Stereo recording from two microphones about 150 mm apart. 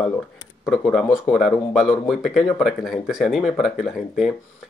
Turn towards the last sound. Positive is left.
turn(degrees=0)  # may be behind; listen again after turning